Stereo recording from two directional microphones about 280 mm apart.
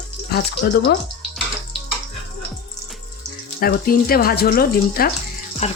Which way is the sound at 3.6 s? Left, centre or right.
Left.